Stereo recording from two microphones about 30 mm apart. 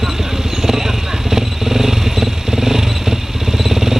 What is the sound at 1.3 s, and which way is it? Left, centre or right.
Motorcycle, centre.